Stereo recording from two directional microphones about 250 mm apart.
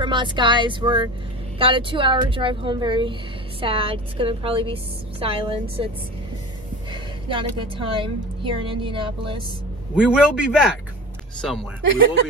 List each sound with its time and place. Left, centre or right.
0.0 s speech: centre
6.9 s a woman's voice: centre
9.9 s a man's voice: centre